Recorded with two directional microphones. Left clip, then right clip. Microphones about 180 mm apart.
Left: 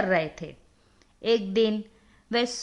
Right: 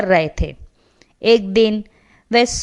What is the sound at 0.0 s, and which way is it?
A woman's voice, 40° right (ahead or behind).